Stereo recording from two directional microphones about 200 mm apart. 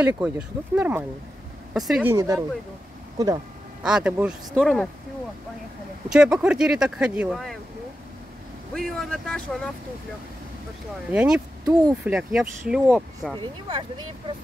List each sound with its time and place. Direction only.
0.0 s speech: 5° right (ahead or behind)
3.8 s speech: 5° right (ahead or behind)
6.0 s speech: 5° right (ahead or behind)
8.7 s speech: centre (ahead or behind)
11.1 s speech: 5° right (ahead or behind)
13.4 s speech: 25° right (ahead or behind)